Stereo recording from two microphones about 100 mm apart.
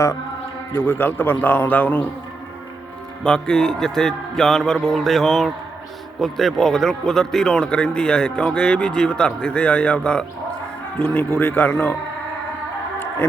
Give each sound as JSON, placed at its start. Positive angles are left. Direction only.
{"t": 0.7, "sound": "a man's voice", "side_deg": 20}
{"t": 3.2, "sound": "a man's voice", "side_deg": 10}